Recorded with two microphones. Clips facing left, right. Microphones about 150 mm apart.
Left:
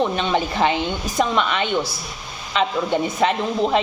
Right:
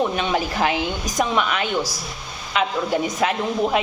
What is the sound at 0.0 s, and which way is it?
A woman's voice, 5° right (ahead or behind).